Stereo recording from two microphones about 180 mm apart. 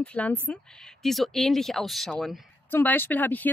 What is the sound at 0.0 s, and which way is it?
Speech, 5° left (ahead or behind).